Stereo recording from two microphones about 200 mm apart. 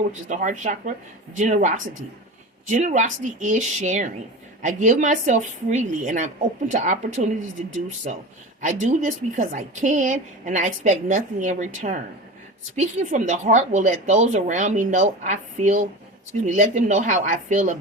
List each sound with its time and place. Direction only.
0.1 s a woman's voice: 40° right (ahead or behind)
8.6 s a woman's voice: 40° right (ahead or behind)